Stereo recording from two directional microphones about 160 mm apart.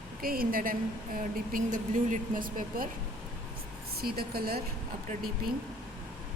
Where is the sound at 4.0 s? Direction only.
75° right (ahead or behind).